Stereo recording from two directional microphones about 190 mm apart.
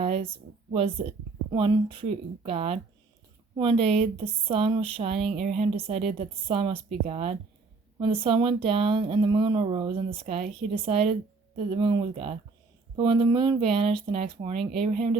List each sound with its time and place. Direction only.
1.0 s speech: 35° right (ahead or behind)
14.6 s speech: centre (ahead or behind)